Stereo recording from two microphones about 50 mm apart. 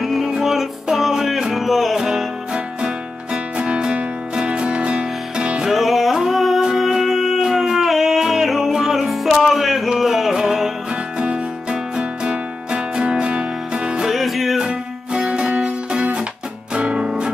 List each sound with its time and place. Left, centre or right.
0.0 s music: centre
3.5 s music: right
5.7 s music: centre
10.9 s music: right
14.0 s music: centre
14.6 s music: centre